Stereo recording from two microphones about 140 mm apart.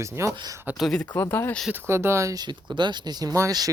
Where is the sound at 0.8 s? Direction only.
5° left (ahead or behind).